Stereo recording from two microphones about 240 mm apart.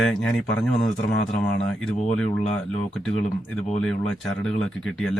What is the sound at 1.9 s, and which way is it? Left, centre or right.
Speech, left.